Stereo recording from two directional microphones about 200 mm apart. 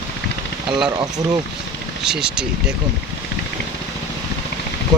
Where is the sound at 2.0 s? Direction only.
5° right (ahead or behind).